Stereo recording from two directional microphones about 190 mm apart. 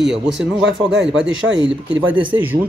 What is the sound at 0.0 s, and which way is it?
Speech, centre (ahead or behind).